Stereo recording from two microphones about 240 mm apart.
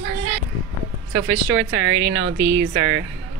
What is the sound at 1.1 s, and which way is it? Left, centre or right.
Speech, right.